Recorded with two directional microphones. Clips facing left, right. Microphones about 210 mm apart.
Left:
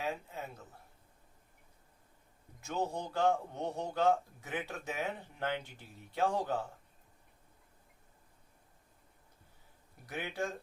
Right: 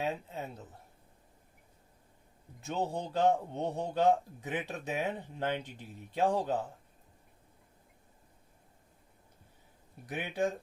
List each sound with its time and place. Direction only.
0.0 s a sound: 20° right (ahead or behind)
2.6 s a man's voice: 20° right (ahead or behind)
10.1 s speech: 20° right (ahead or behind)